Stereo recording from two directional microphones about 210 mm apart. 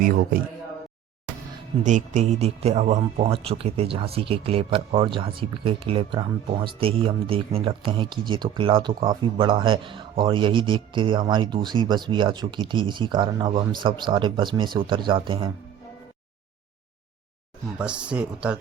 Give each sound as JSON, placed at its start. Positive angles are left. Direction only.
{"t": 1.8, "sound": "speech", "side_deg": -35}
{"t": 17.7, "sound": "speech", "side_deg": -5}